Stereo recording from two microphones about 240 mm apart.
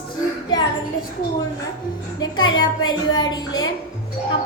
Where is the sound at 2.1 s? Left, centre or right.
Centre.